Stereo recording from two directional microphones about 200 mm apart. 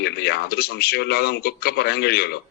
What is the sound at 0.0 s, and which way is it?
A man's voice, 55° left (ahead or behind).